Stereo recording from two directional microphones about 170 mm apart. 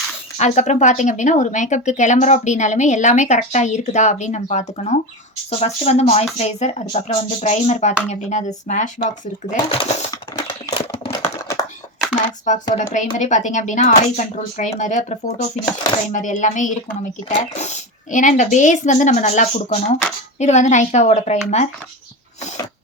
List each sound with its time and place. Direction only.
0.3 s speech: 40° left (ahead or behind)
10.1 s a sound: 20° left (ahead or behind)
12.5 s speech: 45° left (ahead or behind)